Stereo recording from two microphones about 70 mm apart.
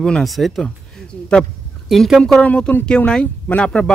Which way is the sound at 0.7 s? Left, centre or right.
Centre.